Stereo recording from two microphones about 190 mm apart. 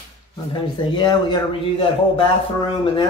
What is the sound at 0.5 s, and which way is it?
Speech, 25° left (ahead or behind).